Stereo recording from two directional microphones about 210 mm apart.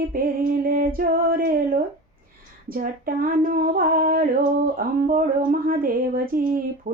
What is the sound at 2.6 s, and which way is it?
Female singing, 45° right (ahead or behind).